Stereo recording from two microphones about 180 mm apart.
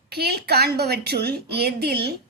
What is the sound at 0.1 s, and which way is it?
A woman's voice, 60° right (ahead or behind).